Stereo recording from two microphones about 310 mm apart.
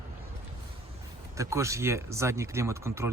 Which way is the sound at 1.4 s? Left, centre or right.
Centre.